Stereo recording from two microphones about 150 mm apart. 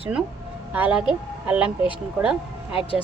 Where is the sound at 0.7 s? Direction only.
10° right (ahead or behind).